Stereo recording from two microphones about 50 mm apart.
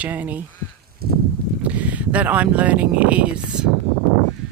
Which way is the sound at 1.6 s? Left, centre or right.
Right.